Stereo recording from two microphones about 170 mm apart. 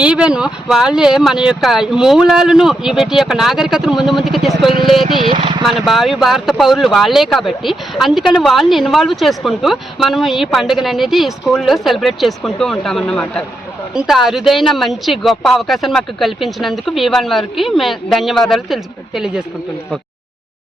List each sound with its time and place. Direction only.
0.0 s a woman's voice: 5° right (ahead or behind)
5.3 s speech: 30° right (ahead or behind)
5.6 s a woman's voice: centre (ahead or behind)